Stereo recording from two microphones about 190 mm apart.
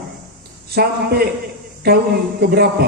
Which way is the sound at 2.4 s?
55° right (ahead or behind).